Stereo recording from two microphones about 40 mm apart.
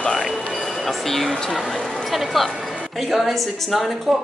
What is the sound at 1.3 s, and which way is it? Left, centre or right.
Speech, centre.